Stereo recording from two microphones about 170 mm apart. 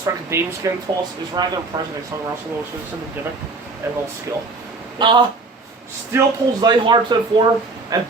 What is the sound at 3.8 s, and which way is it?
Speech, 15° right (ahead or behind).